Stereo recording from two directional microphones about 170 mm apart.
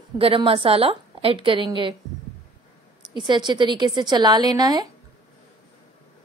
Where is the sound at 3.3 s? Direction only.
25° right (ahead or behind).